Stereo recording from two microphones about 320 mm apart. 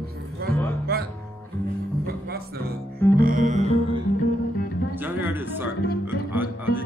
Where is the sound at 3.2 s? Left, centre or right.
Right.